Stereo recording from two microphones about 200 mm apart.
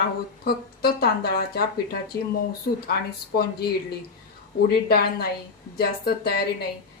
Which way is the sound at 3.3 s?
50° left (ahead or behind).